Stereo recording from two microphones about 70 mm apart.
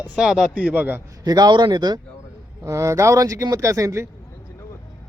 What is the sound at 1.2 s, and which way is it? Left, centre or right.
Speech, right.